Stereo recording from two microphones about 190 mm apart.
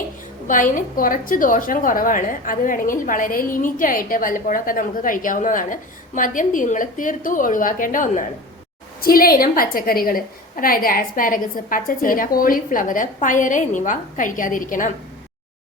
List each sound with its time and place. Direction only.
0.4 s a woman's voice: 45° left (ahead or behind)